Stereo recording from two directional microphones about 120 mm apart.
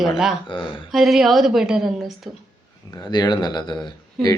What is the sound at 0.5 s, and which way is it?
Speech, 45° left (ahead or behind).